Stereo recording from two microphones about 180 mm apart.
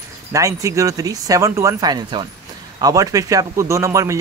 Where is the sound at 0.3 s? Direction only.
15° right (ahead or behind).